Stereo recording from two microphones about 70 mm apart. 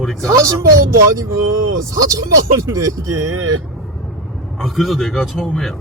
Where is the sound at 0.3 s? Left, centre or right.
Right.